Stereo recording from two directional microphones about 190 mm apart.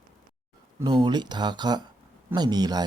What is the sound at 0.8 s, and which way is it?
Speech, 25° right (ahead or behind).